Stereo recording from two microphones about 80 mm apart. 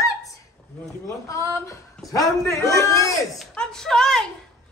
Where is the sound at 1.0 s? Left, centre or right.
Left.